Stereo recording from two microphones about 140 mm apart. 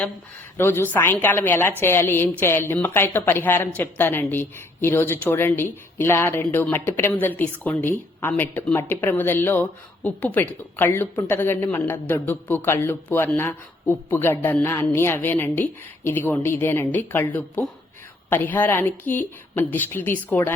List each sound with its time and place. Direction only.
0.5 s speech: 15° left (ahead or behind)